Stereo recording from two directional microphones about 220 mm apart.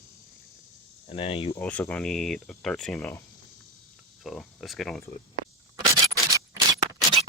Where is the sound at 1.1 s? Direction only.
25° left (ahead or behind).